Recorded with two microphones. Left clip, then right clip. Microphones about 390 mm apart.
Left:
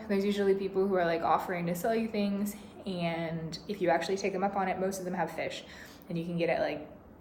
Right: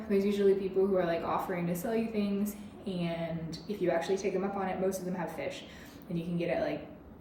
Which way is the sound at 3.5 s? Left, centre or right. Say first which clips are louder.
Left 3 dB; centre.